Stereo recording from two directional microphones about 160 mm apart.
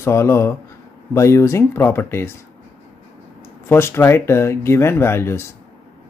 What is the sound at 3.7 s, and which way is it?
Speech, 15° left (ahead or behind).